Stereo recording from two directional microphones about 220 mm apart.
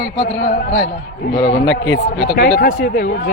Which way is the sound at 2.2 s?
45° left (ahead or behind).